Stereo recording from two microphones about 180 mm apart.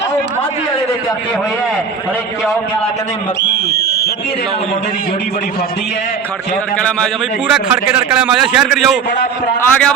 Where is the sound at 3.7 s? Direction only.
65° left (ahead or behind).